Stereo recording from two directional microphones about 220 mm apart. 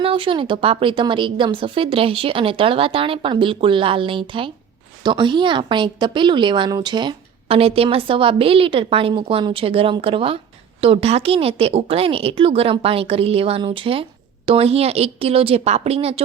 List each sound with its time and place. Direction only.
0.0 s a woman's voice: 25° right (ahead or behind)